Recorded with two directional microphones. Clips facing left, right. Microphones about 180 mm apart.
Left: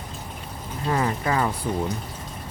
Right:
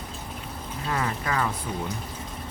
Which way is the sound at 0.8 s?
30° left (ahead or behind).